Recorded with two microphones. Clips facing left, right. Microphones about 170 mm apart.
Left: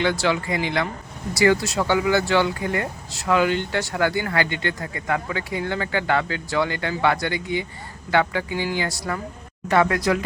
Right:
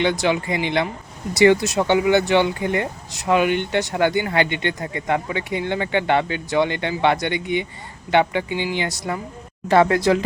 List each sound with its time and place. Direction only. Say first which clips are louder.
0.0 s speech: right 2 dB; 20° right (ahead or behind)
9.6 s speech: right 4 dB; 30° right (ahead or behind)